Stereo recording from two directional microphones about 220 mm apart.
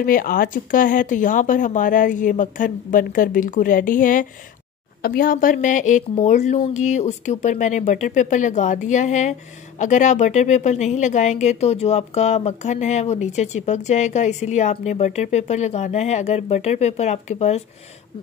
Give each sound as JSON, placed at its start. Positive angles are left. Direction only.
{"t": 0.0, "sound": "speech", "side_deg": 40}